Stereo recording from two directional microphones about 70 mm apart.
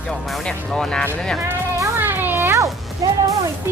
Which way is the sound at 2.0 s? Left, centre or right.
Right.